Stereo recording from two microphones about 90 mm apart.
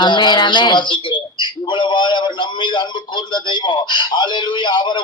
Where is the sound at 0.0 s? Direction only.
60° left (ahead or behind).